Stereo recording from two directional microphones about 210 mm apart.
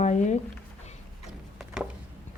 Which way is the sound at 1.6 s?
Centre (ahead or behind).